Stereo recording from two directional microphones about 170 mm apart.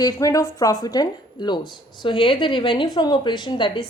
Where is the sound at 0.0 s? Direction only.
20° left (ahead or behind).